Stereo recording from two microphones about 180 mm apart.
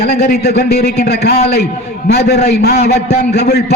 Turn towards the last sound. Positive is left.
turn(degrees=65)  # may be behind; listen again after turning